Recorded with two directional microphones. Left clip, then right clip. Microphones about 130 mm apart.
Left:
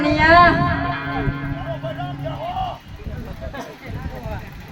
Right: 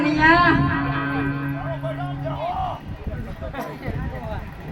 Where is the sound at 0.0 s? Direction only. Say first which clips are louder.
Left 4 dB; 30° left (ahead or behind).